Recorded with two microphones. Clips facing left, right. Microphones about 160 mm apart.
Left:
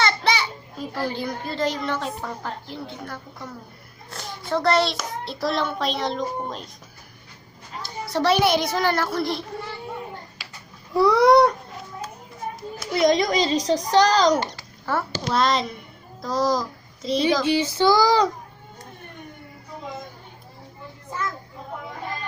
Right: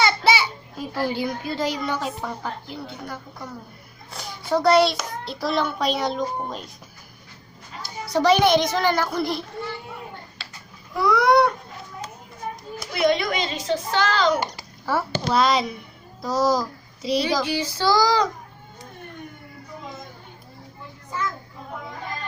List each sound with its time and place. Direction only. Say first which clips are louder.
0.0 s a child's voice: right 2 dB; 5° right (ahead or behind)
8.0 s a child's voice: right 2 dB; centre (ahead or behind)
10.4 s a sound: right 1 dB; 10° left (ahead or behind)
10.9 s a child's voice: left 3 dB; 30° left (ahead or behind)
13.0 s a child's voice: left 2 dB; 35° left (ahead or behind)
14.3 s babbling: left 1 dB; 10° right (ahead or behind)
15.3 s a child's voice: right 1 dB; 5° right (ahead or behind)
17.4 s child singing: left 4 dB; 25° left (ahead or behind)